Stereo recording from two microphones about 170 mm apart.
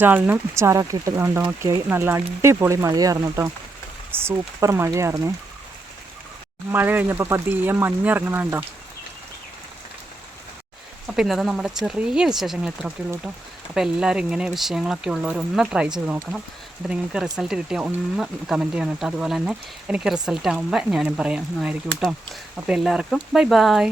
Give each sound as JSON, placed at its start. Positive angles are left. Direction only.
{"t": 0.0, "sound": "speech", "side_deg": -10}
{"t": 6.7, "sound": "speech", "side_deg": -10}
{"t": 11.0, "sound": "speech", "side_deg": 0}
{"t": 16.9, "sound": "speech", "side_deg": -5}